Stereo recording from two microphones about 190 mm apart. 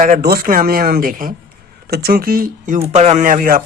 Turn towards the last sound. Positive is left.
turn(degrees=-45)  # may be behind; listen again after turning